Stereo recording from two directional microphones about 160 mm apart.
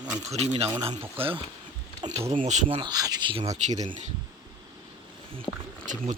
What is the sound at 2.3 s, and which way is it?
Speech, 45° right (ahead or behind).